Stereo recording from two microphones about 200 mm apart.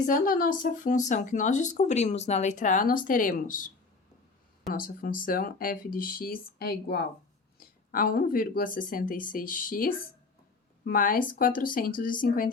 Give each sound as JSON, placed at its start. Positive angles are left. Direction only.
{"t": 0.0, "sound": "speech", "side_deg": 45}
{"t": 4.7, "sound": "speech", "side_deg": 45}